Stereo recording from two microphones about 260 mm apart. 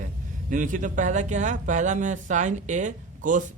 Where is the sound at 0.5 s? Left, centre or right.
Right.